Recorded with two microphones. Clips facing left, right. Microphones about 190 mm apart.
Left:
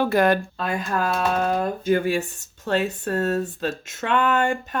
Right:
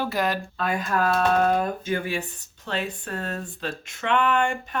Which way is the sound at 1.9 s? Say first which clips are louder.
Left 7 dB; 45° left (ahead or behind).